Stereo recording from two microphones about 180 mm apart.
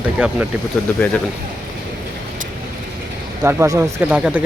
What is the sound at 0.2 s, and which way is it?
Speech, 10° right (ahead or behind).